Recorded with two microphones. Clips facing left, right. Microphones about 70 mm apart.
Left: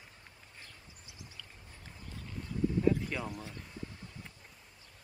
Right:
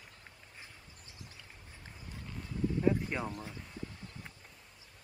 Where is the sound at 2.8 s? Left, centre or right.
Right.